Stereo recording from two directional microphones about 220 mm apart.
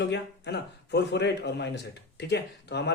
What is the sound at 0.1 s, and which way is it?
A man's voice, 50° left (ahead or behind).